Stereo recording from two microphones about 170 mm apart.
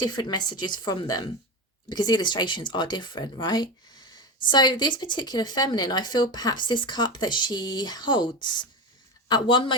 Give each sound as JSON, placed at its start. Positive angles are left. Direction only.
{"t": 0.0, "sound": "speech", "side_deg": 25}